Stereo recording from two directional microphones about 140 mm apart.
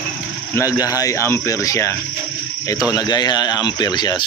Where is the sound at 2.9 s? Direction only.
30° left (ahead or behind).